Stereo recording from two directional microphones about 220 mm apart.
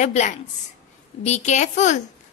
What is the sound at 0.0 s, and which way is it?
A woman's voice, 30° left (ahead or behind).